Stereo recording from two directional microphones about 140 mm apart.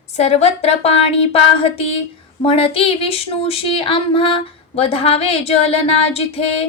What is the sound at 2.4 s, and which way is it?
Speech, 40° left (ahead or behind).